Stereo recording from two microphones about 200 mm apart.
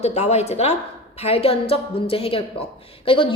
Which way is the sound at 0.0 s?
35° left (ahead or behind).